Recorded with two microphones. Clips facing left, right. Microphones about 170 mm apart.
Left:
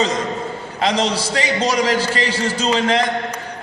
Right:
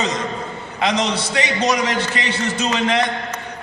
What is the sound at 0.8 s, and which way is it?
A man's voice, 35° left (ahead or behind).